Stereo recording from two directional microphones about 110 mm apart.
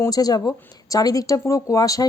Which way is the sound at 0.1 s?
35° left (ahead or behind).